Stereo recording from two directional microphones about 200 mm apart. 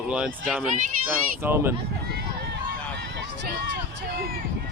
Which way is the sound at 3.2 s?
60° right (ahead or behind).